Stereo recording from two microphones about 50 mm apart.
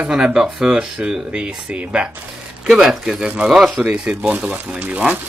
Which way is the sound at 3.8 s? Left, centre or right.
Right.